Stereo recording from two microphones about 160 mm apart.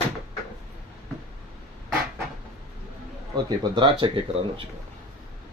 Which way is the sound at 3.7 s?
30° right (ahead or behind).